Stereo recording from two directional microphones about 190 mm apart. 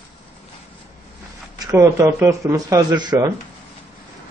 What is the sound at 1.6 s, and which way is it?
Speech, 15° right (ahead or behind).